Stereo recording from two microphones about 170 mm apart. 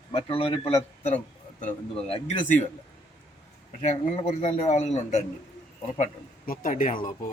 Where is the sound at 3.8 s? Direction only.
40° left (ahead or behind).